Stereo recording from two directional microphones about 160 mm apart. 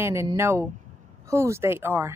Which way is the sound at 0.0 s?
20° right (ahead or behind).